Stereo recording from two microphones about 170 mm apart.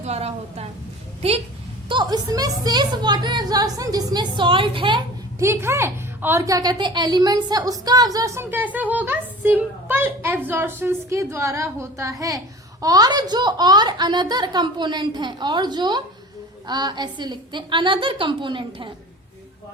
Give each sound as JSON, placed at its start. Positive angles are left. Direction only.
{"t": 0.0, "sound": "a woman's voice", "side_deg": -40}
{"t": 1.9, "sound": "speech", "side_deg": -25}
{"t": 5.4, "sound": "a woman's voice", "side_deg": -15}